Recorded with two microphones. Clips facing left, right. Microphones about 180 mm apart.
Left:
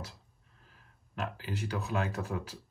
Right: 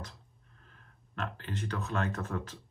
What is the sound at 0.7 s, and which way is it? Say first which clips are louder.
Speech: right 1 dB; 5° left (ahead or behind).